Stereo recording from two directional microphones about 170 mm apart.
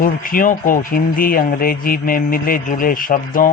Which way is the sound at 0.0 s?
55° left (ahead or behind).